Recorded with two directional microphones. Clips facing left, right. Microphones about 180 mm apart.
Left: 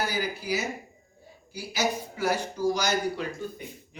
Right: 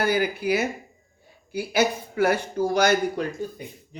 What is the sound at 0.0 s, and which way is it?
Speech, 55° right (ahead or behind).